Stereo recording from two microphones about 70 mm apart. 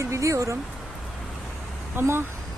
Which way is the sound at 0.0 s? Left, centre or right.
Right.